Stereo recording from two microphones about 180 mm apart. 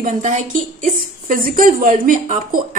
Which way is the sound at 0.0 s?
45° right (ahead or behind).